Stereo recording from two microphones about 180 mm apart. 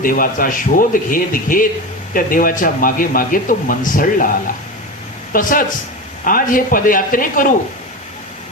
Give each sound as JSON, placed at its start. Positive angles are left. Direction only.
{"t": 0.0, "sound": "speech", "side_deg": 50}
{"t": 5.3, "sound": "speech", "side_deg": 50}